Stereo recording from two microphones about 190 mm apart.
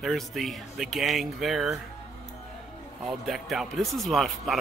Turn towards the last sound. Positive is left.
turn(degrees=0)  # may be behind; listen again after turning